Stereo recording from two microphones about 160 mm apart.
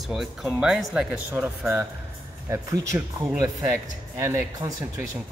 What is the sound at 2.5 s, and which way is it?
Speech, 20° right (ahead or behind).